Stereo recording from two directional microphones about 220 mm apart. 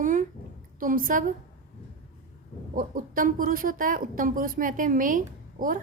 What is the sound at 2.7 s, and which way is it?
A woman's voice, 40° right (ahead or behind).